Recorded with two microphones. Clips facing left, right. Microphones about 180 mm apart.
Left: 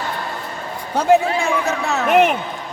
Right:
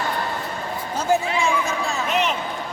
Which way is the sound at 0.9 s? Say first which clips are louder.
Left 6 dB; 65° left (ahead or behind).